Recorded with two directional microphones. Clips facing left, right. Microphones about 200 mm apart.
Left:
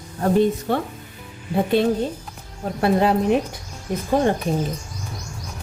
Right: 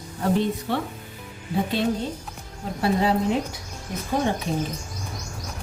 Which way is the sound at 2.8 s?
60° left (ahead or behind).